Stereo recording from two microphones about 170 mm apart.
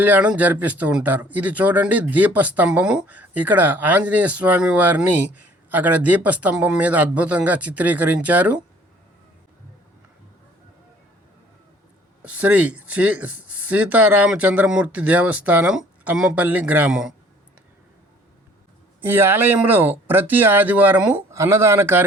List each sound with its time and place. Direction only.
0.0 s speech: 10° right (ahead or behind)
12.2 s speech: 10° right (ahead or behind)
19.0 s speech: 10° right (ahead or behind)